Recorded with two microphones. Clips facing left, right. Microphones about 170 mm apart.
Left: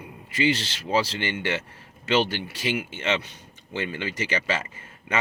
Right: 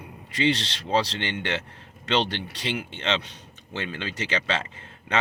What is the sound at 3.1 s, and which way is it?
Speech, 60° right (ahead or behind).